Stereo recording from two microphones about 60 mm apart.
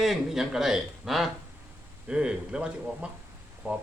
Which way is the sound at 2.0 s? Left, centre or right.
Centre.